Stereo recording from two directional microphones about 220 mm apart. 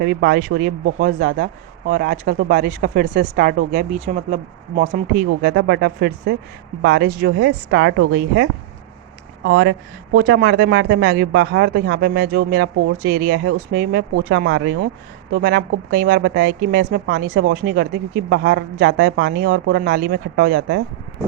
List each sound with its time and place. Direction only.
0.0 s a woman's voice: 50° right (ahead or behind); by 5.2 s 35° right (ahead or behind)
5.4 s a woman's voice: 50° right (ahead or behind)